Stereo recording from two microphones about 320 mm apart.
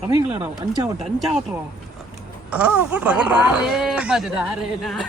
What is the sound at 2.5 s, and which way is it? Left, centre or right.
Speech, centre.